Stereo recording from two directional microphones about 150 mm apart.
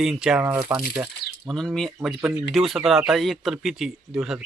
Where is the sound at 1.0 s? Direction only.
20° right (ahead or behind).